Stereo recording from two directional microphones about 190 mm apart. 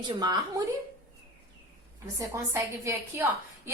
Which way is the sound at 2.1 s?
15° right (ahead or behind).